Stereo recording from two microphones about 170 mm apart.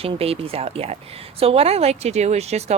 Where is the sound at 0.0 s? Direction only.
35° right (ahead or behind).